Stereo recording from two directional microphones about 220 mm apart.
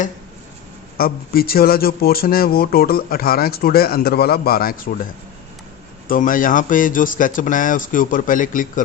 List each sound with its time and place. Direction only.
0.9 s speech: 45° left (ahead or behind)
6.1 s speech: 40° left (ahead or behind)